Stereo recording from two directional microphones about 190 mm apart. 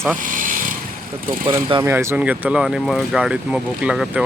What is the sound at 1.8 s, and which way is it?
Speech, 15° right (ahead or behind).